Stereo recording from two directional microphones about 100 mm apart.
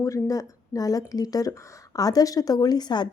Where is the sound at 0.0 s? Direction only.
35° left (ahead or behind).